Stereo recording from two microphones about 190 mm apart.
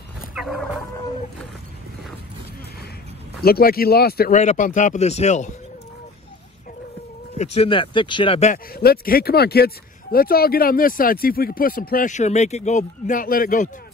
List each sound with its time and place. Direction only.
0.3 s fowl: centre (ahead or behind)
3.4 s speech: 50° left (ahead or behind)
4.4 s speech: 40° left (ahead or behind)
7.3 s speech: 35° left (ahead or behind)
8.7 s speech: 55° left (ahead or behind)